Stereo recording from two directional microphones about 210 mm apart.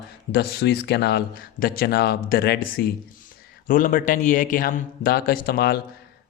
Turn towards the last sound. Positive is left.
turn(degrees=50)  # may be behind; listen again after turning